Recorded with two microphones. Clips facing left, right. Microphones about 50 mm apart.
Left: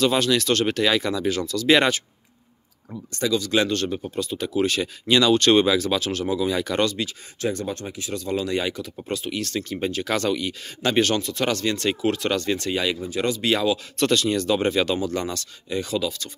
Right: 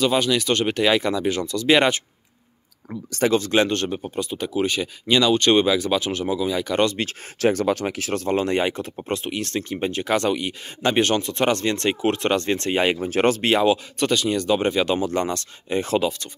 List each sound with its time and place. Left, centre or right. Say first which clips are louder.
0.0 s speech: even; centre; by 1.6 s right
2.9 s speech: right 4 dB; right
3.5 s speech: right 2 dB; right; by 5.8 s centre
5.9 s speech: right 1 dB; right
6.3 s speech: even; centre
7.1 s speech: right 6 dB; right
8.3 s speech: right 3 dB; right
13.0 s speech: right 5 dB; right
13.5 s speech: right 1 dB; right
13.9 s speech: even; centre
15.0 s speech: right 3 dB; right